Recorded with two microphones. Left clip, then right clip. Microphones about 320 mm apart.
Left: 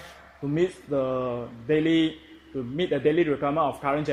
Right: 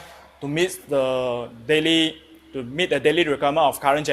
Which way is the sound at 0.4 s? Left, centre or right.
Right.